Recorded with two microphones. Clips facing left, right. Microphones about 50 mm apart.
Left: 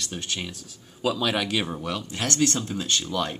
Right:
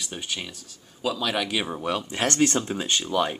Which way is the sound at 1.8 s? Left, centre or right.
Centre.